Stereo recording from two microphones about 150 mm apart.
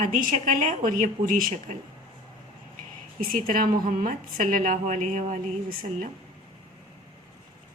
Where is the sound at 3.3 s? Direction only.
70° right (ahead or behind).